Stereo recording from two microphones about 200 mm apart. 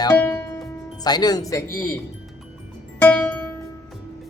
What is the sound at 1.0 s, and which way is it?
Speech, 20° left (ahead or behind).